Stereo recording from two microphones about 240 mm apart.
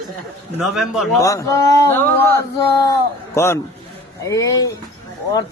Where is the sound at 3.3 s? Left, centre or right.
Centre.